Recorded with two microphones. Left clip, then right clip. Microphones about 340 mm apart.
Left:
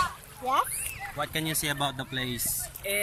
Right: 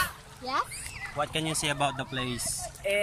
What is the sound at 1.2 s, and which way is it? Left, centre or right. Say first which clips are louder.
Speech: right 1 dB; centre.